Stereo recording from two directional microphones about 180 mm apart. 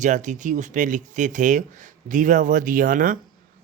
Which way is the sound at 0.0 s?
45° right (ahead or behind).